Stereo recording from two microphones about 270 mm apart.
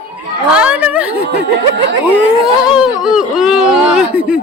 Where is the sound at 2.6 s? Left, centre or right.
Centre.